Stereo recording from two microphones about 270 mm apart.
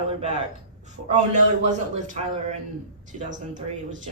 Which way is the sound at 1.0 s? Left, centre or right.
Right.